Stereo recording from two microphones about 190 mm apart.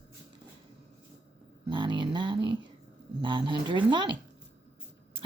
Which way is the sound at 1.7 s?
25° right (ahead or behind).